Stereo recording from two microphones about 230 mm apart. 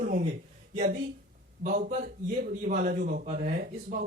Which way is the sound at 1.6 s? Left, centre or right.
Right.